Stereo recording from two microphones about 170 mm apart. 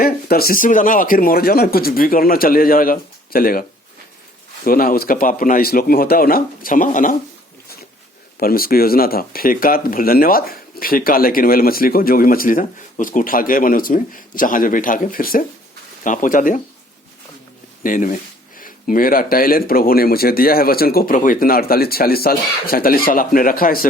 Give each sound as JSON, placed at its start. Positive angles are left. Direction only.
{"t": 0.0, "sound": "speech", "side_deg": 60}
{"t": 8.4, "sound": "speech", "side_deg": 60}
{"t": 17.8, "sound": "speech", "side_deg": 50}